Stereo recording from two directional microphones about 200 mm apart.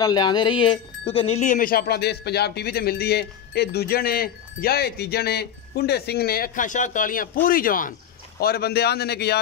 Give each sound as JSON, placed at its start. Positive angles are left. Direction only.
{"t": 0.0, "sound": "speech", "side_deg": 20}